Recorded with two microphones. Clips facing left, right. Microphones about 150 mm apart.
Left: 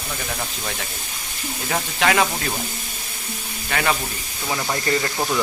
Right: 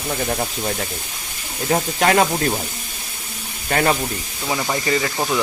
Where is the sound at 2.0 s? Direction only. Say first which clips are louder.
Right 2 dB; 40° right (ahead or behind).